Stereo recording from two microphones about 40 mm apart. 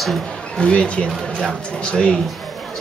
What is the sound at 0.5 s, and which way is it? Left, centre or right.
Speech, left.